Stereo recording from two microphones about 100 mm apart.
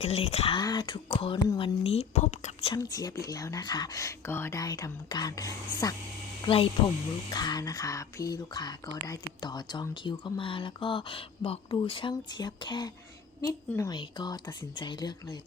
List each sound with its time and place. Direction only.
0.0 s speech: 90° left
0.5 s speech: 45° left (ahead or behind)
1.1 s speech: 65° left (ahead or behind); by 2.7 s 80° left
2.7 s speech: 35° left (ahead or behind)
4.3 s speech: 25° left (ahead or behind); by 12.9 s 45° left (ahead or behind)
13.4 s speech: 30° left (ahead or behind)
13.9 s speech: 45° left (ahead or behind)